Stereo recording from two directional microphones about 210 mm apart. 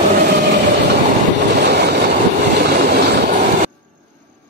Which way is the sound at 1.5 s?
50° right (ahead or behind).